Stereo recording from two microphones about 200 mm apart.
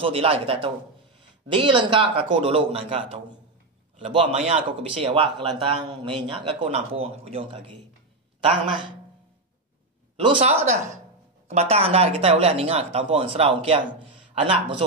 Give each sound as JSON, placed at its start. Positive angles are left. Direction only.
{"t": 0.0, "sound": "speech", "side_deg": -30}
{"t": 10.2, "sound": "speech", "side_deg": -30}